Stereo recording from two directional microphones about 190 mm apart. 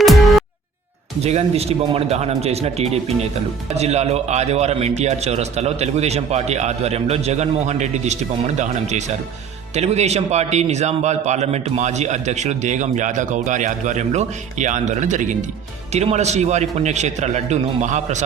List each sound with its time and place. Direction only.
0.0 s music: centre (ahead or behind)
1.2 s a man's voice: 35° right (ahead or behind)